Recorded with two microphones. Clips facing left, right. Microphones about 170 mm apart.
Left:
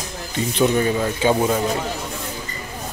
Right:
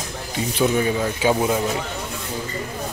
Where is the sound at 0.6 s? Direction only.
10° right (ahead or behind).